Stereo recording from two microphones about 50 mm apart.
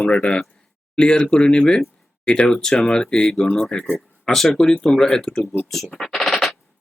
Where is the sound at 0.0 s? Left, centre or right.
Centre.